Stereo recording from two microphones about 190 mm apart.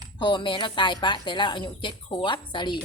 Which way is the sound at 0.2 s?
25° left (ahead or behind).